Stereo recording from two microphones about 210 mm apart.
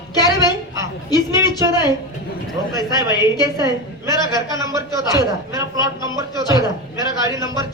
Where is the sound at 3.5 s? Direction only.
15° right (ahead or behind).